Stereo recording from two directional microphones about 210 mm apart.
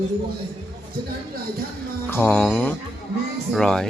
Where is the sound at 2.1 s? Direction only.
10° left (ahead or behind).